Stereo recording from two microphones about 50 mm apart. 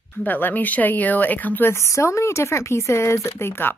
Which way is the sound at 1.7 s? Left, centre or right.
Left.